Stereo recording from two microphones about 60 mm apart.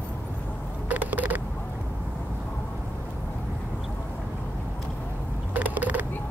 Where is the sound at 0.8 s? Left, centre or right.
Right.